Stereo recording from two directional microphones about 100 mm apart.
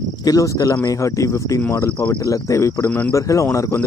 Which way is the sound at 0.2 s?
35° left (ahead or behind).